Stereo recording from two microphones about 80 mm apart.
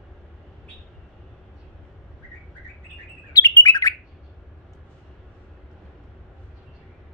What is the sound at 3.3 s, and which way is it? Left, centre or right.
Bird, left.